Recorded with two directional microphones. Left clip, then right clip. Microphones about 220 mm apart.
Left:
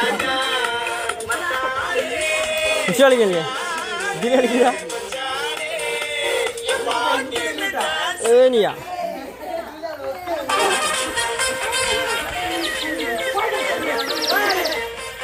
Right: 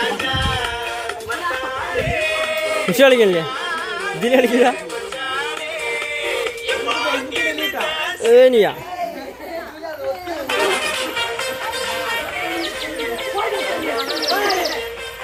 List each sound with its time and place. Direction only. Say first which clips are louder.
2.9 s a man's voice: right 3 dB; 30° right (ahead or behind)
8.2 s speech: right 3 dB; 30° right (ahead or behind)
10.5 s a sound: even; 15° left (ahead or behind)
11.3 s music: left 2 dB; 40° left (ahead or behind)
14.2 s music: right 1 dB; 5° left (ahead or behind)